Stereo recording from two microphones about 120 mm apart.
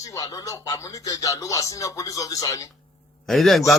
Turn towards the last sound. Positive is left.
turn(degrees=0)  # may be behind; listen again after turning